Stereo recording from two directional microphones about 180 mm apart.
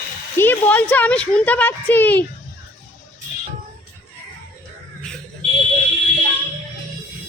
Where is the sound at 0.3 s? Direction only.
10° left (ahead or behind).